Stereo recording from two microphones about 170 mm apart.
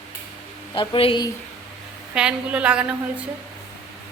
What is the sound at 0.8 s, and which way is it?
Speech, 30° left (ahead or behind).